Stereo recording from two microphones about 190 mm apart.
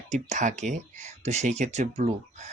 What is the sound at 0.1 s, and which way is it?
Speech, 40° right (ahead or behind).